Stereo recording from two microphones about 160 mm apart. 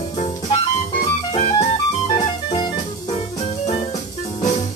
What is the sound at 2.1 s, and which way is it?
Music, 25° left (ahead or behind).